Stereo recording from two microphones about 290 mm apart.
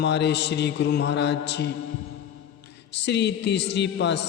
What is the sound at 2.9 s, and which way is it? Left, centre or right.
A man's voice, left.